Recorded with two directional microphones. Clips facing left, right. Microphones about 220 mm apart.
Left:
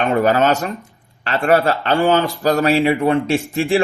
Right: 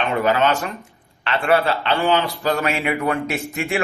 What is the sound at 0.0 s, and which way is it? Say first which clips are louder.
Speech: left 4 dB; 45° left (ahead or behind).